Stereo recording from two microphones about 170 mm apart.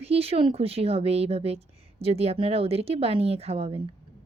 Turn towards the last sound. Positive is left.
turn(degrees=-35)  # may be behind; listen again after turning